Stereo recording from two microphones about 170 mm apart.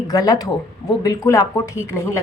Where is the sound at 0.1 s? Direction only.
20° left (ahead or behind).